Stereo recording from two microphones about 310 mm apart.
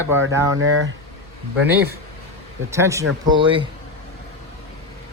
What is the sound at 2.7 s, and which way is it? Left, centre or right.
Speech, centre.